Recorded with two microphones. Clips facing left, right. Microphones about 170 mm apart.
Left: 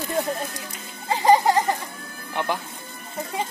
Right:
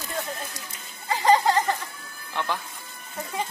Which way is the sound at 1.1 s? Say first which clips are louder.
Left 3 dB; 15° left (ahead or behind).